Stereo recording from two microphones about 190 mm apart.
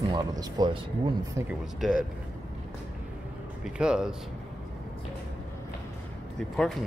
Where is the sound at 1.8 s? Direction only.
5° right (ahead or behind).